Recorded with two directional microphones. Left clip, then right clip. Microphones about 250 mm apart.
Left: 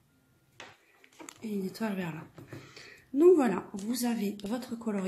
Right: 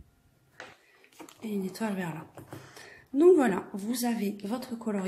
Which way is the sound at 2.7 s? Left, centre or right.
Centre.